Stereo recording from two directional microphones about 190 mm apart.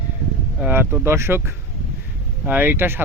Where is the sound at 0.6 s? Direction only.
10° right (ahead or behind).